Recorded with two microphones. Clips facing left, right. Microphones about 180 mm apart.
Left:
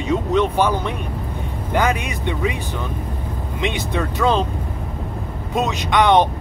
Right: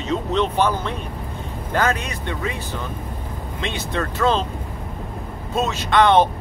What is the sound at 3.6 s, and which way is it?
Speech, 15° left (ahead or behind).